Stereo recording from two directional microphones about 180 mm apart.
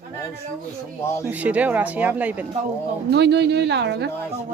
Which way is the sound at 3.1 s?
70° right (ahead or behind).